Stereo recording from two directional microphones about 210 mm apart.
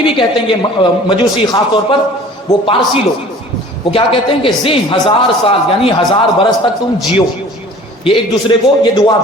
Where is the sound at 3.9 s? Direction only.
25° left (ahead or behind).